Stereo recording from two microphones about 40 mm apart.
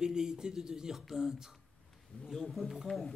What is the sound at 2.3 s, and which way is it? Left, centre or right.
Speech, centre.